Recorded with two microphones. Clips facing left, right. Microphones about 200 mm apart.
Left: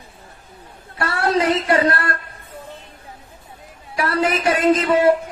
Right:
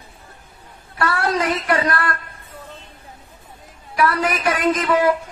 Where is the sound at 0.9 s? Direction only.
25° left (ahead or behind).